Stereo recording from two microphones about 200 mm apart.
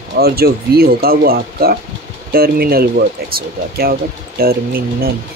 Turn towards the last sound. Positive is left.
turn(degrees=-50)  # may be behind; listen again after turning